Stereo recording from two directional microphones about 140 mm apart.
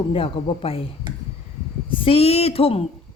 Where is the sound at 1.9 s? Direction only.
40° left (ahead or behind).